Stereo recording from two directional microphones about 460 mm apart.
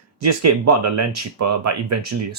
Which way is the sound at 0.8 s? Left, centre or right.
Right.